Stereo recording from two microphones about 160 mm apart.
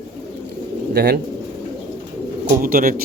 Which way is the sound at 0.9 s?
90° right.